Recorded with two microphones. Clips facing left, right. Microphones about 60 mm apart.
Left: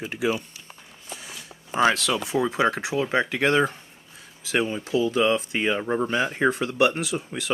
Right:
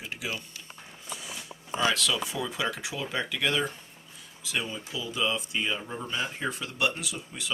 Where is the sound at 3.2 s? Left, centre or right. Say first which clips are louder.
Left 7 dB; left.